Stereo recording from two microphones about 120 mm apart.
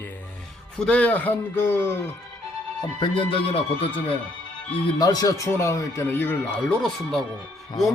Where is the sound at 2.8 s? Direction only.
45° left (ahead or behind).